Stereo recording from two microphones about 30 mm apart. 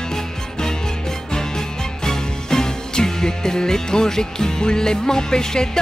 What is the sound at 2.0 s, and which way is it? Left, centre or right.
Music, left.